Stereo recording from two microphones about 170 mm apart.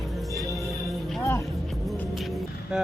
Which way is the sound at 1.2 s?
15° left (ahead or behind).